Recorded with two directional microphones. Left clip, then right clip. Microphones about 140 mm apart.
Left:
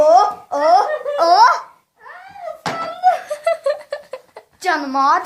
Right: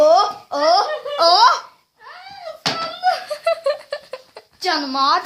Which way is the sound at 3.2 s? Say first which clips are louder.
Left 1 dB; centre (ahead or behind).